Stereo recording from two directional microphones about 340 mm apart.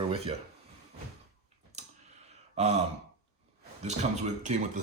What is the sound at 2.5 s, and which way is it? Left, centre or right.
Speech, centre.